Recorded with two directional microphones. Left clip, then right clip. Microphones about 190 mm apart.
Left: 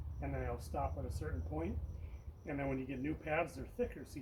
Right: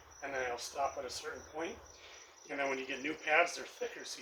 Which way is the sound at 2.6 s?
5° left (ahead or behind).